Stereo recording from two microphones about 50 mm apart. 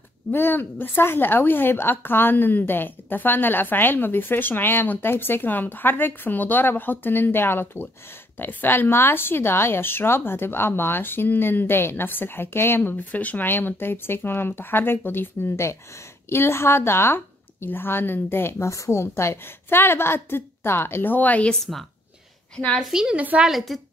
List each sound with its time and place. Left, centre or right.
0.3 s a woman's voice: left
12.9 s speech: left
13.5 s a woman's voice: left
15.5 s speech: left
16.3 s a woman's voice: left
18.7 s a woman's voice: left
21.7 s a woman's voice: centre
22.8 s a woman's voice: centre
23.1 s a woman's voice: right
23.5 s a woman's voice: centre